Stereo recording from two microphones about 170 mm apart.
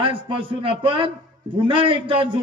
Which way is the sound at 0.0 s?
30° right (ahead or behind).